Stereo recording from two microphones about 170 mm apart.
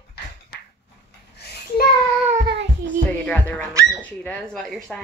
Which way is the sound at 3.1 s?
10° left (ahead or behind).